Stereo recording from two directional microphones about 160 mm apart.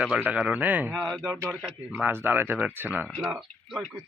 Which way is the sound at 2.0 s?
15° right (ahead or behind).